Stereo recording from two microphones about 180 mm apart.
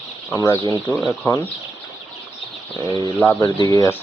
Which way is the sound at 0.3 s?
20° left (ahead or behind).